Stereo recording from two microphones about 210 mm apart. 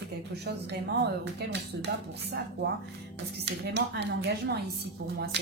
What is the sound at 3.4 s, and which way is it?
A woman's voice, 55° right (ahead or behind).